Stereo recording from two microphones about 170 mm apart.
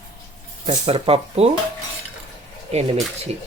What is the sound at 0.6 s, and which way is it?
Speech, 35° right (ahead or behind).